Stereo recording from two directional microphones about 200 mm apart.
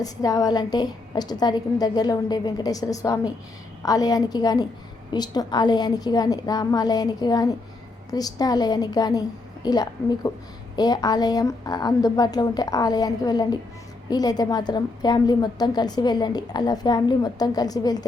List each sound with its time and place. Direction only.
0.0 s a woman's voice: 20° left (ahead or behind)